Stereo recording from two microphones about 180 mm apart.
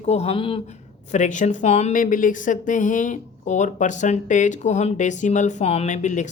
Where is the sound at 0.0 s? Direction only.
35° left (ahead or behind).